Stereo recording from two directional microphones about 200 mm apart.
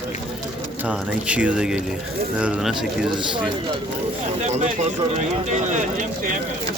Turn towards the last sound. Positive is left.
turn(degrees=-35)  # may be behind; listen again after turning